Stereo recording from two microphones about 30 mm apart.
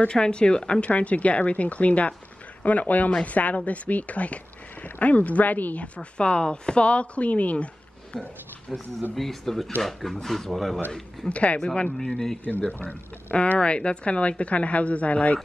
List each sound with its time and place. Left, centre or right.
0.1 s speech: left
0.7 s speech: left
2.6 s speech: left
4.8 s speech: left
6.1 s speech: left
7.5 s a sound: left
9.1 s speech: centre
11.2 s speech: left
12.0 s speech: centre
12.4 s speech: left
13.6 s speech: left